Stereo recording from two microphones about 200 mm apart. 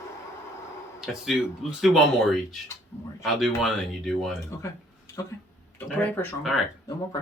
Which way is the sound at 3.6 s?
Centre (ahead or behind).